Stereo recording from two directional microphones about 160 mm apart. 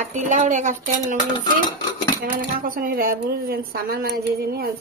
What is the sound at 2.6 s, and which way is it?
A woman's voice, 60° right (ahead or behind).